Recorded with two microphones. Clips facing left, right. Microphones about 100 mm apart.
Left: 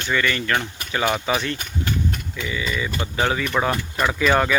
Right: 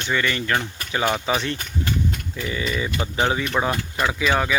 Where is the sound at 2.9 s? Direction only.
20° right (ahead or behind).